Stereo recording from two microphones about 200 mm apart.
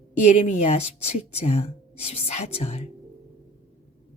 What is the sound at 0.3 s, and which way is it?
Speech, 35° left (ahead or behind).